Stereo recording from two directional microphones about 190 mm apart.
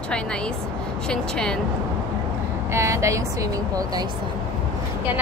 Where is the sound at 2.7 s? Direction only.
15° right (ahead or behind).